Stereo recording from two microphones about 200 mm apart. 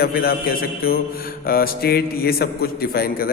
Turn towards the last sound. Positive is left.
turn(degrees=50)  # may be behind; listen again after turning